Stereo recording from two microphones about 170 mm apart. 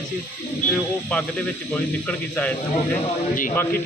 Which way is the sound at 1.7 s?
5° left (ahead or behind).